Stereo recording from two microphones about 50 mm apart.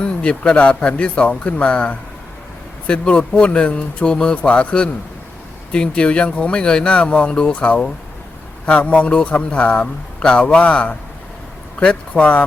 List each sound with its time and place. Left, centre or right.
0.0 s a man's voice: left